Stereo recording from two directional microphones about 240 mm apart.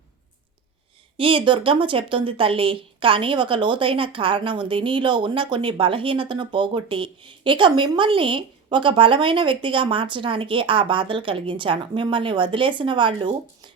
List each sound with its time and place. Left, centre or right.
1.2 s speech: right